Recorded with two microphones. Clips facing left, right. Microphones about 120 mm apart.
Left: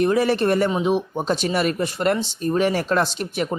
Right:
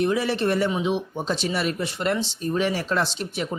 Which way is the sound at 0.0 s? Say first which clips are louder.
Left 4 dB; 50° left (ahead or behind).